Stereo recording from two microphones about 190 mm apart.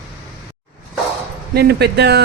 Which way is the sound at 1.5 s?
55° right (ahead or behind).